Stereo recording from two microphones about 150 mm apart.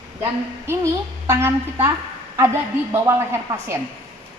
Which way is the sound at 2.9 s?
15° right (ahead or behind).